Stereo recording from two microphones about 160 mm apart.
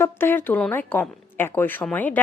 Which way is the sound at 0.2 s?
15° left (ahead or behind).